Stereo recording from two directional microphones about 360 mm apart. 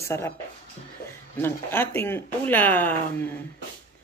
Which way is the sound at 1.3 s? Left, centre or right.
Centre.